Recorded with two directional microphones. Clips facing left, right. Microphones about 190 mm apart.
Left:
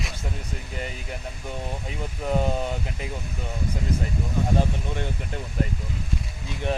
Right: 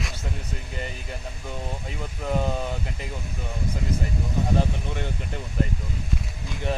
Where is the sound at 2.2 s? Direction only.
15° left (ahead or behind).